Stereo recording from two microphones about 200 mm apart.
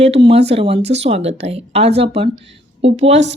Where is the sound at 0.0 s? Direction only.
30° right (ahead or behind).